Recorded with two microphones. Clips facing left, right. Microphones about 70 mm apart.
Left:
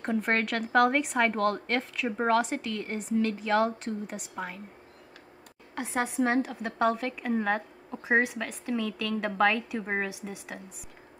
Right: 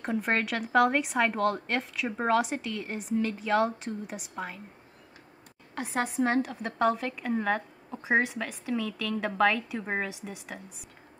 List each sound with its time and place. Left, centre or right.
0.0 s speech: centre
5.8 s speech: centre